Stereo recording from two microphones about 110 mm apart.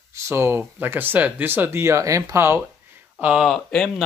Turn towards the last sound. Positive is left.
turn(degrees=5)  # may be behind; listen again after turning